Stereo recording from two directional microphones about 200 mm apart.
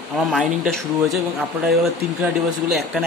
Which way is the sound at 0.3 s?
Centre (ahead or behind).